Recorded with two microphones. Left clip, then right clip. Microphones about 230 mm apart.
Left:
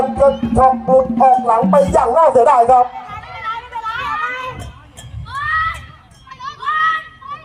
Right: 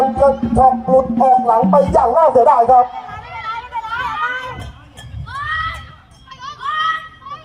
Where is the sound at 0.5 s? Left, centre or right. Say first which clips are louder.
Even; left.